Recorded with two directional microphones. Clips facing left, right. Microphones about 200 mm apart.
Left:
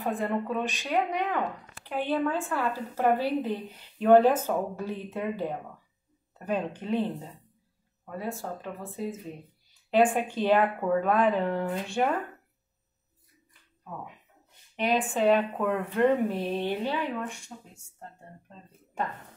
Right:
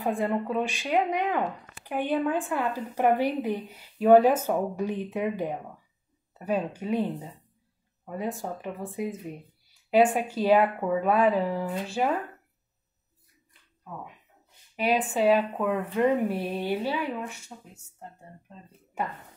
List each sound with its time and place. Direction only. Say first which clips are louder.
0.0 s speech: right 2 dB; 10° right (ahead or behind)
14.8 s speech: right 1 dB; 5° right (ahead or behind)
19.0 s speech: even; 5° right (ahead or behind)